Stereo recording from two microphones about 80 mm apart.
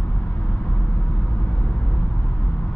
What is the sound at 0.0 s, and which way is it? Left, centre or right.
Vehicle, centre.